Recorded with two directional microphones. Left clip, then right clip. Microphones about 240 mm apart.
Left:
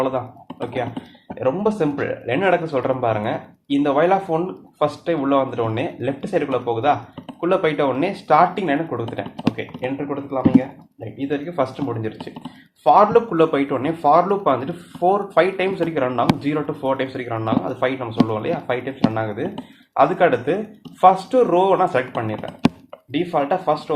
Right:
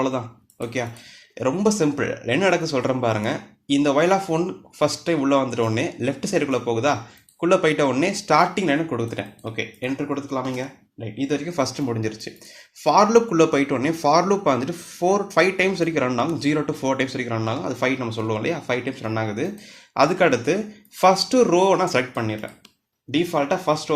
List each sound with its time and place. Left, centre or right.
1.4 s speech: right
11.2 s speech: right